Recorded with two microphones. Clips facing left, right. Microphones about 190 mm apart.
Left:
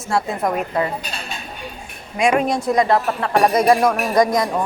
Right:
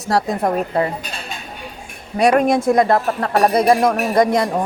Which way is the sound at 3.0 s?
35° right (ahead or behind).